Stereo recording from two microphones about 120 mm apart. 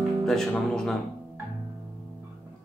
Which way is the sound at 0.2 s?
5° left (ahead or behind).